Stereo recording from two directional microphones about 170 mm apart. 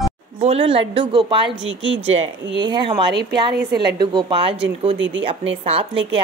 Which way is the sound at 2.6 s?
25° right (ahead or behind).